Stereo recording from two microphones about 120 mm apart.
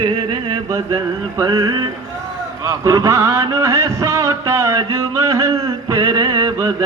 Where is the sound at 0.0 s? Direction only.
35° right (ahead or behind).